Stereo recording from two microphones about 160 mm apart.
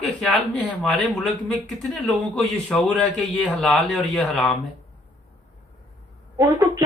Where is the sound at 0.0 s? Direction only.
Centre (ahead or behind).